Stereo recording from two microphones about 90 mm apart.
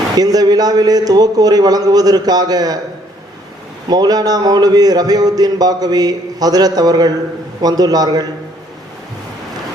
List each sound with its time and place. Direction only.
0.2 s a man's voice: 45° right (ahead or behind)
3.8 s a man's voice: 50° right (ahead or behind)